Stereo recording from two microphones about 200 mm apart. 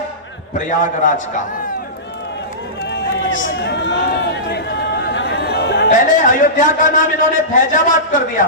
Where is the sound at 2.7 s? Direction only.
60° left (ahead or behind).